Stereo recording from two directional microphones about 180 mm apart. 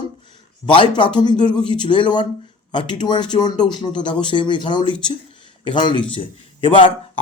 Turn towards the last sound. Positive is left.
turn(degrees=30)  # may be behind; listen again after turning